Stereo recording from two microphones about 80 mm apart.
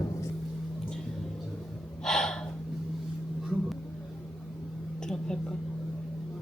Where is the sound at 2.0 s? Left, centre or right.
Centre.